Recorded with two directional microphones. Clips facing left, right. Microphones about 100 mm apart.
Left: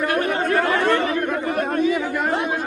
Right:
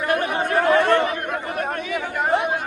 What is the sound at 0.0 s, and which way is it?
Chatter, 15° right (ahead or behind).